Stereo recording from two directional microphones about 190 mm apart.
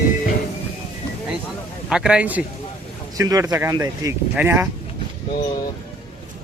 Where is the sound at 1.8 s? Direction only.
5° right (ahead or behind).